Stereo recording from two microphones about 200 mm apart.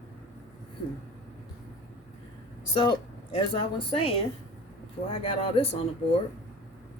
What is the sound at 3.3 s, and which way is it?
Speech, 25° left (ahead or behind).